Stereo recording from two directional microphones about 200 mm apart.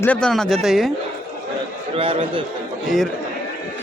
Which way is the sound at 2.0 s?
30° right (ahead or behind).